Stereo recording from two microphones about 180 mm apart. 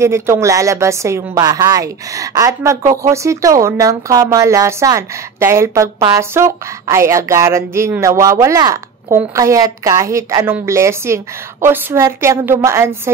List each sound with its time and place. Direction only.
0.0 s a woman's voice: 15° right (ahead or behind)